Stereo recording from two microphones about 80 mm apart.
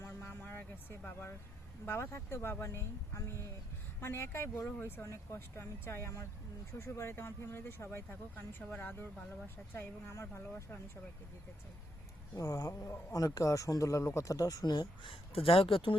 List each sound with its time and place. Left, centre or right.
0.0 s music: left
1.8 s speech: left
12.3 s speech: left
15.6 s speech: left